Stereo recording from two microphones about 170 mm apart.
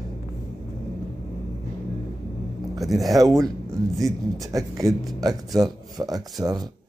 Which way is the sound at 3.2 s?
20° right (ahead or behind).